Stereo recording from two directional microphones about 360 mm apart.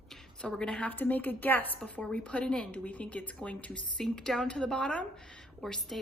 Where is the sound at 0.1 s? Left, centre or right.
Centre.